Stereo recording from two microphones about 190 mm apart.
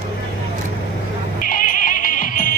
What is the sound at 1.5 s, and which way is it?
Music, 45° left (ahead or behind).